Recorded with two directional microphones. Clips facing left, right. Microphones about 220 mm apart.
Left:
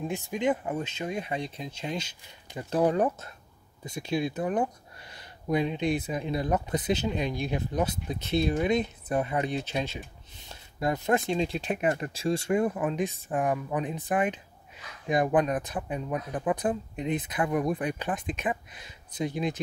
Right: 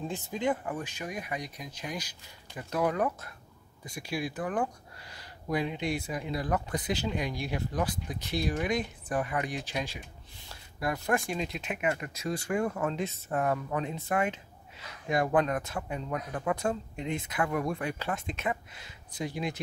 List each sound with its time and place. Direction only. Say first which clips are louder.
0.1 s speech: left 3 dB; 15° left (ahead or behind)